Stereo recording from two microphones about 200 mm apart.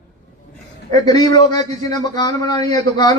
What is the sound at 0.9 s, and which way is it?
A man's voice, 20° left (ahead or behind).